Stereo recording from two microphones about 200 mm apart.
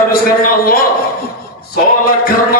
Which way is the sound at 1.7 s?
45° left (ahead or behind).